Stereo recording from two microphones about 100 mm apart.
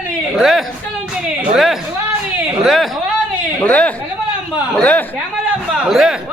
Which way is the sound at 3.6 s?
15° left (ahead or behind).